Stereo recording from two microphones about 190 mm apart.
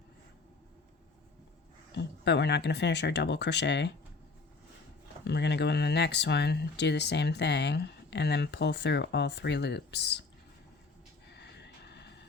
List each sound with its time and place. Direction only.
2.0 s speech: 65° left (ahead or behind)
5.2 s speech: 65° left (ahead or behind)
11.3 s vehicle: 65° left (ahead or behind)